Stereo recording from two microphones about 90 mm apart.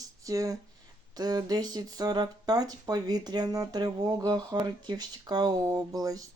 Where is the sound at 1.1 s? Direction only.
45° right (ahead or behind).